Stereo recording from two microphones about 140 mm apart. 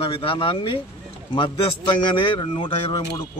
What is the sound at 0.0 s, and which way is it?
Speech, 40° left (ahead or behind).